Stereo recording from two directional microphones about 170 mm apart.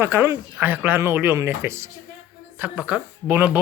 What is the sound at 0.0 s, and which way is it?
A woman's voice, 15° right (ahead or behind).